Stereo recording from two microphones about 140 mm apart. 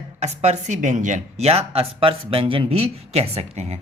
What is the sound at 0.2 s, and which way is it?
Speech, 55° right (ahead or behind).